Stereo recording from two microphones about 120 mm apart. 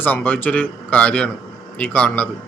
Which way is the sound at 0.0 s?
15° left (ahead or behind).